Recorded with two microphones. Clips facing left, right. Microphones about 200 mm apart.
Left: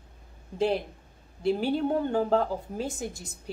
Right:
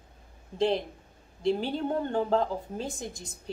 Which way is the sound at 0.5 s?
5° left (ahead or behind).